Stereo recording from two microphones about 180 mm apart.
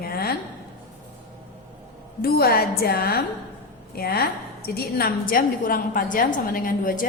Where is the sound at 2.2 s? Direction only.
55° left (ahead or behind).